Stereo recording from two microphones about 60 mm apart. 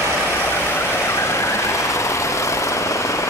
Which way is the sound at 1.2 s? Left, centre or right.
Left.